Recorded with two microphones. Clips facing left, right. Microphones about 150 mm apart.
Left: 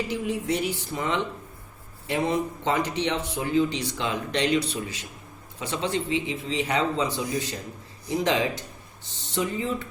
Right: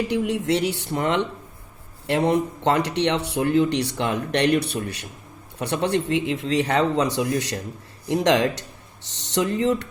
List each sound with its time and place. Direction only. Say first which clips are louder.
0.1 s a man's voice: right 5 dB; 75° right (ahead or behind)